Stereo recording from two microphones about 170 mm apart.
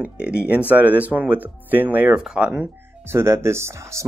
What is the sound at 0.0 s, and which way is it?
Speech, 5° right (ahead or behind).